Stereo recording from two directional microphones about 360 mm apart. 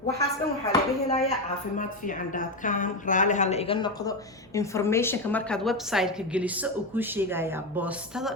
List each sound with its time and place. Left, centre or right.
0.7 s a woman's voice: centre